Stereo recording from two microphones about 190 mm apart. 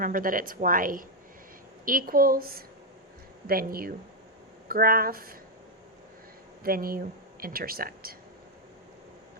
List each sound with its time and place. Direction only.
0.0 s a woman's voice: 45° right (ahead or behind)
6.6 s speech: 50° right (ahead or behind)